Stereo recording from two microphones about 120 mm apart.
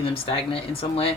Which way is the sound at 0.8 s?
50° left (ahead or behind).